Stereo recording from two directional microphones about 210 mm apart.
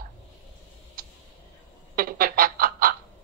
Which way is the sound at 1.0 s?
45° right (ahead or behind).